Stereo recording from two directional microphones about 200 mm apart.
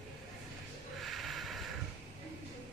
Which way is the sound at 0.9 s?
Centre (ahead or behind).